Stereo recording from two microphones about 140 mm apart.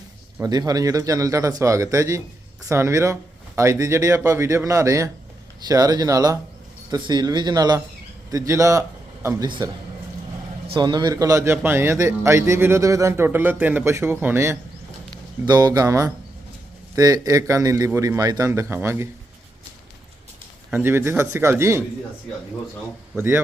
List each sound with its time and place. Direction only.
0.4 s speech: 25° right (ahead or behind)
10.8 s a man's voice: 30° right (ahead or behind)
20.7 s a man's voice: 15° right (ahead or behind)
23.1 s a man's voice: 15° right (ahead or behind)